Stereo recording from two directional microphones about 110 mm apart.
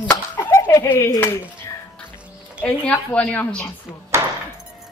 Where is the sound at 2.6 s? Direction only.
15° left (ahead or behind).